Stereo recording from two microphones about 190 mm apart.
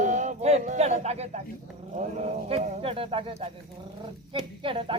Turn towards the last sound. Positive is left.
turn(degrees=-25)  # may be behind; listen again after turning